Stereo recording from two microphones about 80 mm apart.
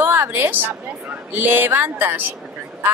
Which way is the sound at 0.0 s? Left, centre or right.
Right.